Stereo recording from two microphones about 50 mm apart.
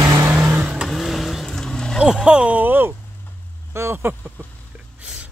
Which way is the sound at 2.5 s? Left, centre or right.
Right.